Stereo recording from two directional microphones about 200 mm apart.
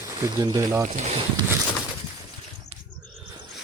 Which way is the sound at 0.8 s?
30° right (ahead or behind).